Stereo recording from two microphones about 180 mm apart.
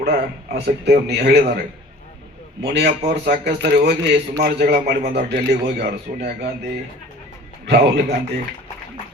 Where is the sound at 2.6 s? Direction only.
70° right (ahead or behind).